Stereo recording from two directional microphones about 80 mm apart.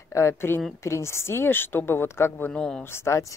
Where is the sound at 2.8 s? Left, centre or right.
Left.